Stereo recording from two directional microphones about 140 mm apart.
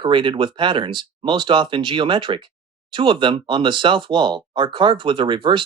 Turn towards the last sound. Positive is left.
turn(degrees=-35)  # may be behind; listen again after turning